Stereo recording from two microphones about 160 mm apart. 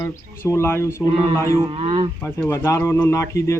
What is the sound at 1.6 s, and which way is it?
Speech, 35° right (ahead or behind).